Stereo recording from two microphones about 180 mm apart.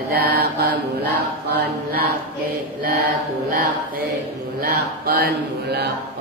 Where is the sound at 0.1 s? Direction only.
60° right (ahead or behind).